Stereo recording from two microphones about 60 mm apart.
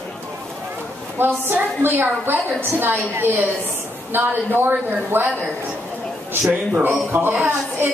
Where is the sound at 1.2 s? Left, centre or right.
Right.